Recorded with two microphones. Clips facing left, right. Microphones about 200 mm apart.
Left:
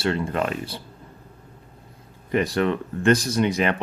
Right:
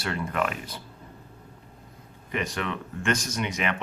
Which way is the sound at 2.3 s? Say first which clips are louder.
Left 9 dB; 35° left (ahead or behind).